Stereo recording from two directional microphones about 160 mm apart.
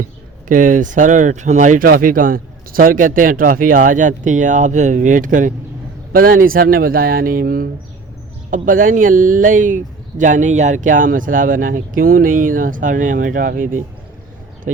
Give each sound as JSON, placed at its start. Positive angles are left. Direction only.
{"t": 0.4, "sound": "speech", "side_deg": -55}